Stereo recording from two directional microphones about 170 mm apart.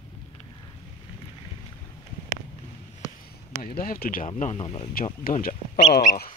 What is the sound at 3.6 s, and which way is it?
Speech, 55° left (ahead or behind).